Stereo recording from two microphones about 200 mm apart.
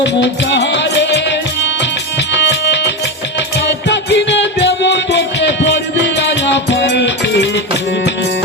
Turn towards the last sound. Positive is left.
turn(degrees=60)  # may be behind; listen again after turning